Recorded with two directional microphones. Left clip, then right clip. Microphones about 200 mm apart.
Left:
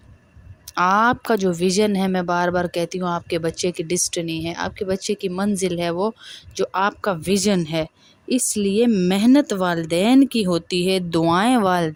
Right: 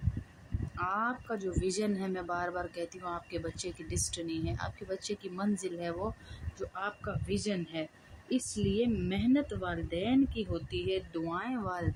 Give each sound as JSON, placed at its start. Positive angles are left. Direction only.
{"t": 0.8, "sound": "speech", "side_deg": 55}
{"t": 6.6, "sound": "speech", "side_deg": 65}